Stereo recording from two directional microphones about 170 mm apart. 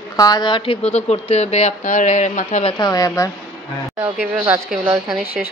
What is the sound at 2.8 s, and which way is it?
Speech, 20° left (ahead or behind).